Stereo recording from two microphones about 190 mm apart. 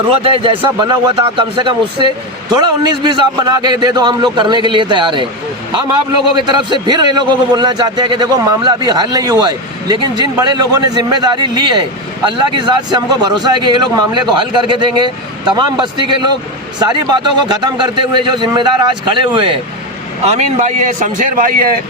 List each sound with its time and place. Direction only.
0.1 s a man's voice: 30° right (ahead or behind)
6.3 s a man's voice: 25° right (ahead or behind)
16.8 s a man's voice: 20° right (ahead or behind); by 21.8 s 50° right (ahead or behind)